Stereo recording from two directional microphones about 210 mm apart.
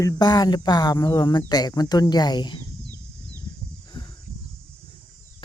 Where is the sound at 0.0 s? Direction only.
20° left (ahead or behind).